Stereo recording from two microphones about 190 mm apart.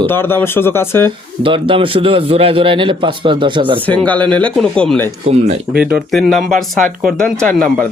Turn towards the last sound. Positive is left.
turn(degrees=5)  # may be behind; listen again after turning